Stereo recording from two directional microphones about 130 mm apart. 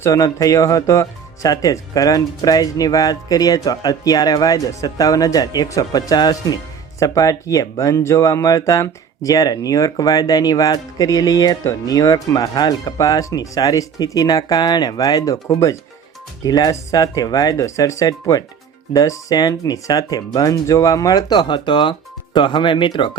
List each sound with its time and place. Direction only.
0.0 s speech: 25° left (ahead or behind)